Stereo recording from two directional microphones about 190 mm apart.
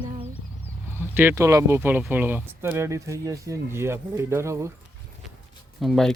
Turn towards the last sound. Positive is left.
turn(degrees=0)  # may be behind; listen again after turning